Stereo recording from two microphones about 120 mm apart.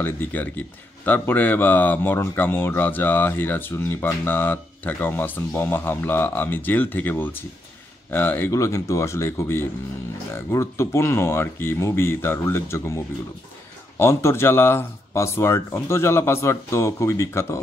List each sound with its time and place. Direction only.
0.0 s a man's voice: 15° left (ahead or behind)